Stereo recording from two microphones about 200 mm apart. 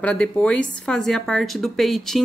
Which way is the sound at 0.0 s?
5° left (ahead or behind).